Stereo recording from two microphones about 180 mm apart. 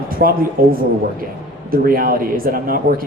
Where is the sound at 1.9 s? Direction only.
55° right (ahead or behind).